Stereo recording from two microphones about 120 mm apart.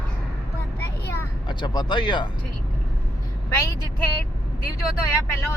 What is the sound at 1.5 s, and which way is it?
Speech, 40° left (ahead or behind).